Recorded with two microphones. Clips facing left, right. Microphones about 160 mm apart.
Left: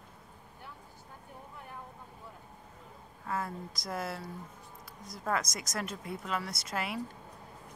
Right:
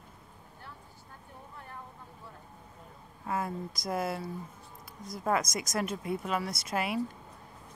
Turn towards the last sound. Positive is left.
turn(degrees=-15)  # may be behind; listen again after turning